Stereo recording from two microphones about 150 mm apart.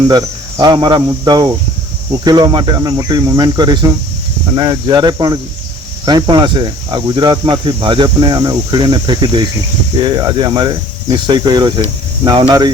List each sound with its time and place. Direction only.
0.1 s speech: 25° right (ahead or behind)
6.1 s cricket: 30° right (ahead or behind)
9.9 s speech: 30° right (ahead or behind)